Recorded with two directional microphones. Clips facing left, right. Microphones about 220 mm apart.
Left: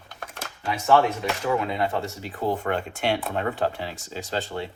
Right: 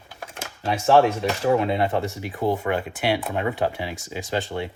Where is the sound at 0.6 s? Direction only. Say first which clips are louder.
Right 1 dB; 40° right (ahead or behind).